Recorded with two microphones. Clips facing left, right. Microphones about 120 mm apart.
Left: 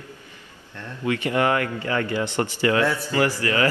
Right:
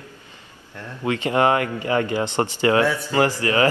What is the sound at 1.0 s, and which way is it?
A man's voice, 25° right (ahead or behind).